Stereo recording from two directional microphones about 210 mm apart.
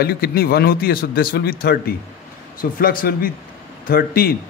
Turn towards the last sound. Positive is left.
turn(degrees=45)  # may be behind; listen again after turning